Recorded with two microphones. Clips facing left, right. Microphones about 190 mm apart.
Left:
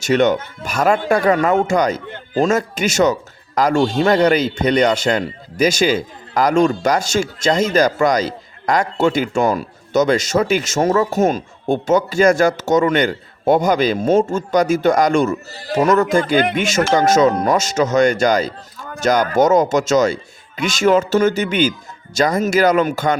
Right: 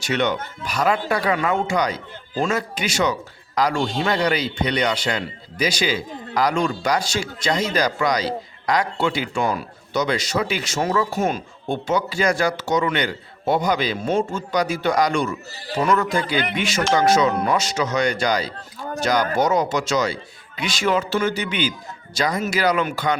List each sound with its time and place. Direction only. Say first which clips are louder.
0.0 s speech: left 7 dB; 45° left (ahead or behind)
2.0 s speech: left 8 dB; 65° left (ahead or behind)
2.4 s speech: left 6 dB; 45° left (ahead or behind)